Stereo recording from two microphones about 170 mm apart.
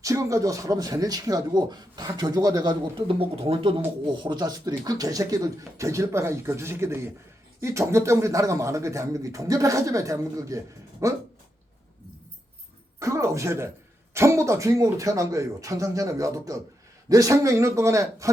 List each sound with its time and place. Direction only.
0.0 s speech: 20° right (ahead or behind)
13.0 s speech: 15° right (ahead or behind)